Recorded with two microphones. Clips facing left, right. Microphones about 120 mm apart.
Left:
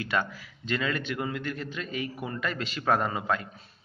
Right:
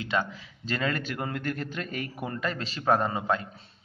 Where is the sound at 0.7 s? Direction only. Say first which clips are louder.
Even; 40° right (ahead or behind).